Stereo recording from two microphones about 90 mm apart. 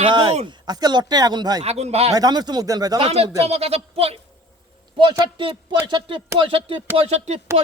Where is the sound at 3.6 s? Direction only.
90° right.